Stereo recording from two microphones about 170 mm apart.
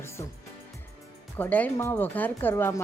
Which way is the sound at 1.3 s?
10° left (ahead or behind).